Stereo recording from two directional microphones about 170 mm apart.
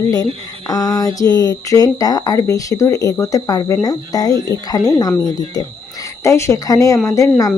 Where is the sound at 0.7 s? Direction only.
20° left (ahead or behind).